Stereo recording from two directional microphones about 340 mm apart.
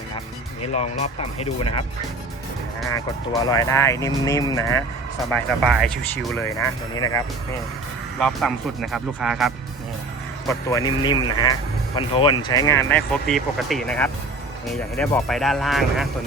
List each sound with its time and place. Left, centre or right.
0.7 s speech: centre
2.9 s speech: centre
8.2 s speech: centre
10.4 s speech: centre